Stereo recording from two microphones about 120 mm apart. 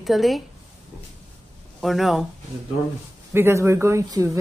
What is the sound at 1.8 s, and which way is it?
Speech, centre (ahead or behind).